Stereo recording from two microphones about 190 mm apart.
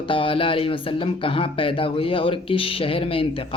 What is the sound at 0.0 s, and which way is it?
Speech, 25° left (ahead or behind).